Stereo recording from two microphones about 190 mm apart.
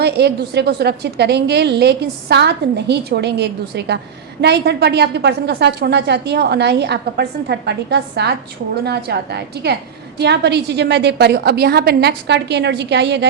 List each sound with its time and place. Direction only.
0.0 s a woman's voice: 60° right (ahead or behind)